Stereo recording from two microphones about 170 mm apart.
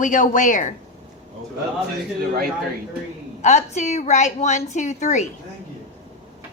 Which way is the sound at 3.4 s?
45° left (ahead or behind).